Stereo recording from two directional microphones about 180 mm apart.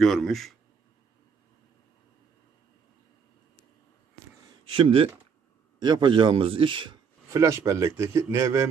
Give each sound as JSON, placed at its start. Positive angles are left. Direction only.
{"t": 0.0, "sound": "speech", "side_deg": 0}
{"t": 4.7, "sound": "speech", "side_deg": -30}